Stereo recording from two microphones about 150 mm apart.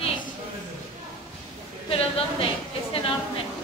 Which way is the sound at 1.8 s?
35° left (ahead or behind).